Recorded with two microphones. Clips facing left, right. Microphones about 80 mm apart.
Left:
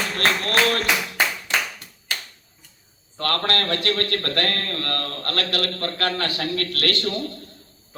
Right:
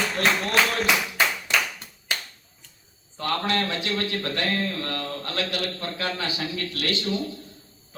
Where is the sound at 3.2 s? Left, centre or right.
Left.